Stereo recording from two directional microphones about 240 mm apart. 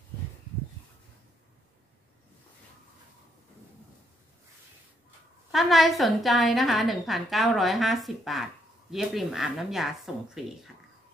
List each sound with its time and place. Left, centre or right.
5.5 s a woman's voice: centre